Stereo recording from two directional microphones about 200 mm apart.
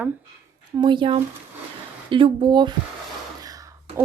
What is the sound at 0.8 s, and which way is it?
Speech, 25° right (ahead or behind).